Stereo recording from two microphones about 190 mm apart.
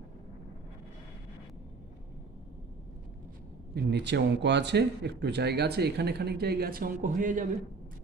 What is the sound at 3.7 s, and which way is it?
Speech, 65° right (ahead or behind).